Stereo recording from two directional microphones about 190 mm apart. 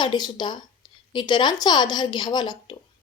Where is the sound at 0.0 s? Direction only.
25° left (ahead or behind).